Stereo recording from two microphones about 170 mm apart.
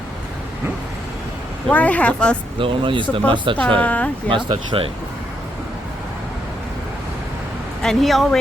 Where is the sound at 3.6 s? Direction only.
10° left (ahead or behind).